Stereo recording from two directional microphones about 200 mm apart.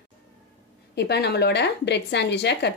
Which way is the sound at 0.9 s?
55° left (ahead or behind).